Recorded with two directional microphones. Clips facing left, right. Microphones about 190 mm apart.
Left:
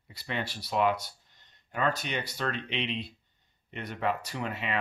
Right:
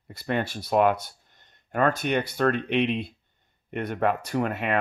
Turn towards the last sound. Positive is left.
turn(degrees=-55)  # may be behind; listen again after turning